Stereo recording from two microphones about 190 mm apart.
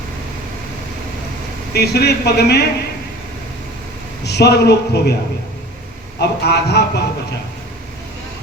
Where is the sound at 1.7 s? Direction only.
60° left (ahead or behind).